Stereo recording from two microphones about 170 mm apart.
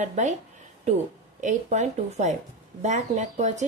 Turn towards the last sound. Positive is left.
turn(degrees=-45)  # may be behind; listen again after turning